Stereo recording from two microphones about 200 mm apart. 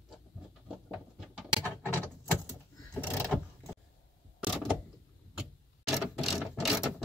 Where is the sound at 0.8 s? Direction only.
Centre (ahead or behind).